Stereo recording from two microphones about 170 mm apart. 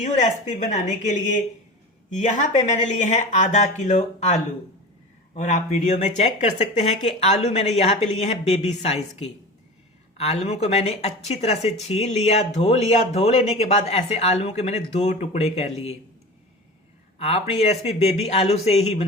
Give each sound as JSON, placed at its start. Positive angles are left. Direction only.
{"t": 0.0, "sound": "speech", "side_deg": 45}
{"t": 17.2, "sound": "speech", "side_deg": 40}